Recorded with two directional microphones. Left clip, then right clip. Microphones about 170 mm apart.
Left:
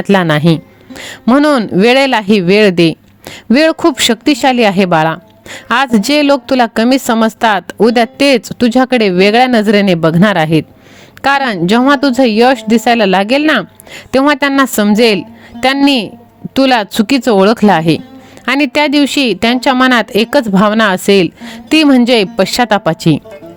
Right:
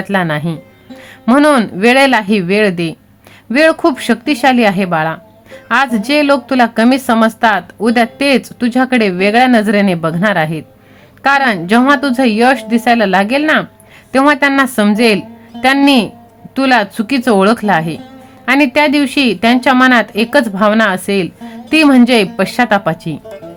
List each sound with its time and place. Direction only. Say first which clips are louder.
0.0 s speech: left 5 dB; 55° left (ahead or behind)
0.5 s music: left 11 dB; 50° left (ahead or behind)
1.2 s speech: even; 35° left (ahead or behind); by 23.2 s 55° left (ahead or behind)